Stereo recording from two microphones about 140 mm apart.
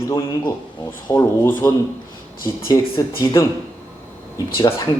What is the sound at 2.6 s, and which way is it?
Speech, 35° left (ahead or behind).